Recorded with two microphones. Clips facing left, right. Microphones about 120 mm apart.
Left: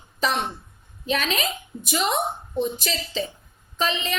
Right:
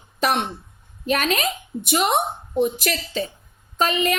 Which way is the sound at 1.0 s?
50° right (ahead or behind).